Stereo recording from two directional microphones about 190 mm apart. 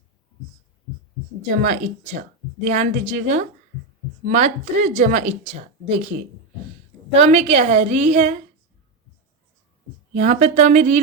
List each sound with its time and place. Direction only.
1.6 s speech: 40° right (ahead or behind)
10.2 s speech: 35° right (ahead or behind)